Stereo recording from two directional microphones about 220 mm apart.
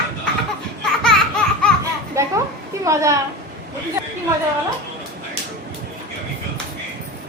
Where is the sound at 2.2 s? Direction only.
10° right (ahead or behind).